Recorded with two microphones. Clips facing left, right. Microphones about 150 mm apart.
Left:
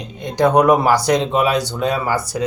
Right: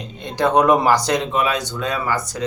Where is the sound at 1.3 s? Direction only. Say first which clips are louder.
Left 4 dB; 35° left (ahead or behind).